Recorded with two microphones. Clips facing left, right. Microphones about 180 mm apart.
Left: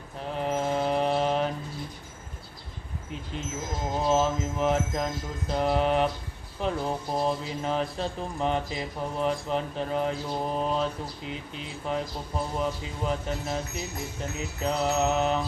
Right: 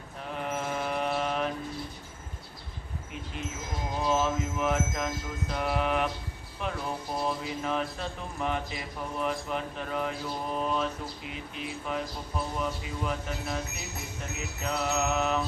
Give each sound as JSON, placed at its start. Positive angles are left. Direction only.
{"t": 0.3, "sound": "mantra", "side_deg": 35}
{"t": 4.0, "sound": "music", "side_deg": 30}
{"t": 11.9, "sound": "music", "side_deg": 30}
{"t": 14.6, "sound": "music", "side_deg": 30}